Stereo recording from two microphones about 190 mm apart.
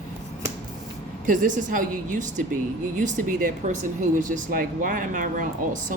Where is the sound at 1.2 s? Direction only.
45° right (ahead or behind).